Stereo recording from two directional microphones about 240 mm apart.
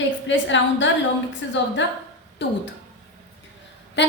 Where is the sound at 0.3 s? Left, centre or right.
Left.